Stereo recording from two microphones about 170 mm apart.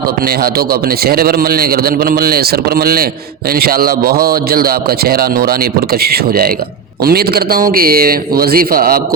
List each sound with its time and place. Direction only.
0.4 s a man's voice: 60° right (ahead or behind)